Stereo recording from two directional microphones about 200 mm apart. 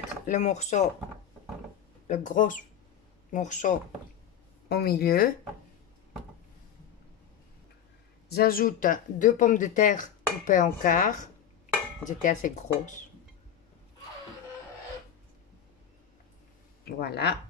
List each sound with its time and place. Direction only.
0.3 s speech: 35° left (ahead or behind)
2.0 s speech: 40° left (ahead or behind)
4.6 s speech: 50° left (ahead or behind)
8.3 s speech: 50° left (ahead or behind)
17.0 s speech: 55° left (ahead or behind)